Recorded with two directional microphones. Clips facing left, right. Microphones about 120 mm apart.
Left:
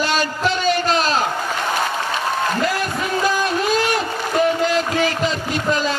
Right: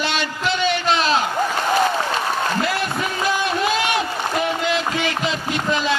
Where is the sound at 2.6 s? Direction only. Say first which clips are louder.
Left 1 dB; 40° left (ahead or behind).